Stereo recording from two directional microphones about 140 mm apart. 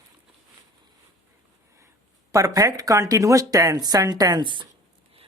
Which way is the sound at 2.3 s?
25° right (ahead or behind).